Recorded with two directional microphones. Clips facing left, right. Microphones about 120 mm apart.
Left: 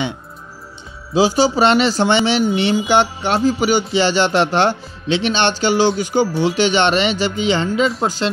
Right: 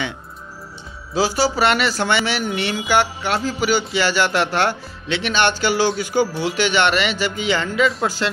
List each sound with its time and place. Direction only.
1.1 s speech: 20° left (ahead or behind)